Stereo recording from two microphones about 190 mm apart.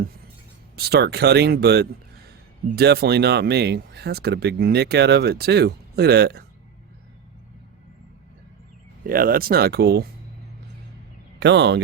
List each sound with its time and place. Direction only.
0.8 s speech: 60° right (ahead or behind)
9.0 s speech: 50° right (ahead or behind)
11.3 s speech: 65° right (ahead or behind)